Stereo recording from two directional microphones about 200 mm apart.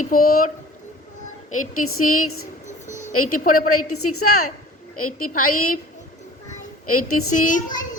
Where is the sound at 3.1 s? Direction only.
90° left.